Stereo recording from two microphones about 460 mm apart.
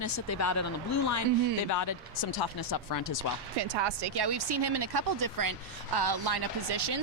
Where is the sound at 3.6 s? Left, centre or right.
Right.